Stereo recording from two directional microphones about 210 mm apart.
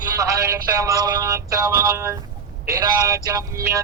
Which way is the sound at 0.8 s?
15° right (ahead or behind).